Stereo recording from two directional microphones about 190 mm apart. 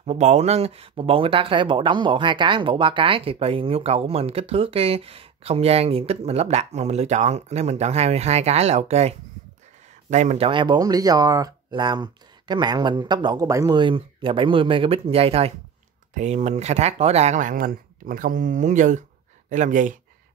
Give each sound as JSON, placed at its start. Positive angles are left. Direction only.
{"t": 0.0, "sound": "speech", "side_deg": -35}